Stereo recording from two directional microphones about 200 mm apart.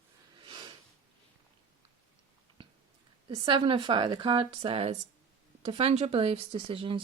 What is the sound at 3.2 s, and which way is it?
Speech, 25° right (ahead or behind).